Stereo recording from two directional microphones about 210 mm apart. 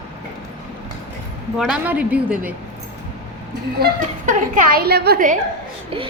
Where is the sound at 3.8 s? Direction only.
40° right (ahead or behind).